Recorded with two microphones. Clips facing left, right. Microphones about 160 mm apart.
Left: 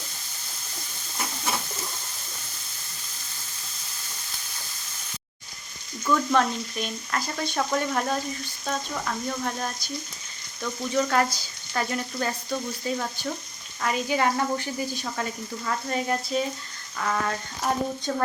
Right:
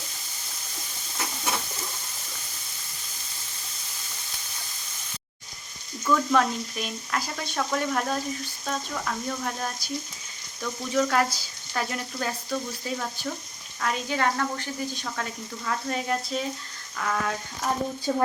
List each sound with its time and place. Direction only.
6.1 s frying: 5° right (ahead or behind)
18.1 s speech: 5° right (ahead or behind)